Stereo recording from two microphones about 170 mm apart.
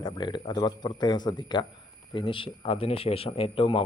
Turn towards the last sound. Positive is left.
turn(degrees=30)  # may be behind; listen again after turning